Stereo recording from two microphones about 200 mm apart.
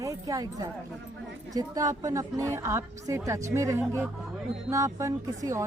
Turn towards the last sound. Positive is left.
turn(degrees=-15)  # may be behind; listen again after turning